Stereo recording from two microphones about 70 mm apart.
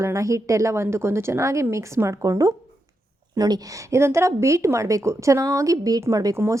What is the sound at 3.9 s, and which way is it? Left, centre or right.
A woman's voice, right.